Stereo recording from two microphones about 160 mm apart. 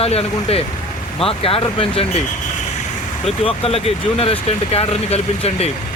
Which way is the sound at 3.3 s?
35° left (ahead or behind).